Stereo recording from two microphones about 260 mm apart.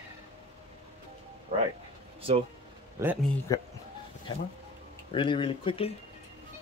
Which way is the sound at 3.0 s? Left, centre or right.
Centre.